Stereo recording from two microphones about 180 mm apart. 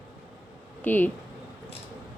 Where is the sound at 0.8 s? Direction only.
10° left (ahead or behind).